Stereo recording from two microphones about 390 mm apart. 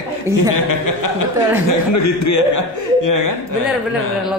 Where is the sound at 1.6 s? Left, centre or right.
Left.